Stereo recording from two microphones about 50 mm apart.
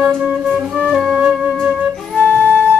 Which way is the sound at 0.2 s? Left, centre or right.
Right.